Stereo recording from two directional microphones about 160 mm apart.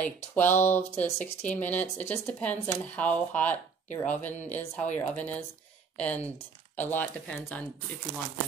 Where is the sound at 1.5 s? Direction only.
10° left (ahead or behind).